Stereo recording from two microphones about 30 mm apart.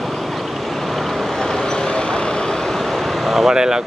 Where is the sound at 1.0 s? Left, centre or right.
Centre.